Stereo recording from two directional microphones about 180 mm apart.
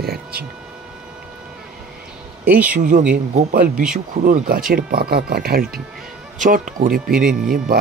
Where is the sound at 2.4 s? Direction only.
10° right (ahead or behind).